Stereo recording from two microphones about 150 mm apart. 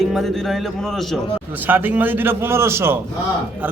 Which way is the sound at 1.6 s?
10° right (ahead or behind).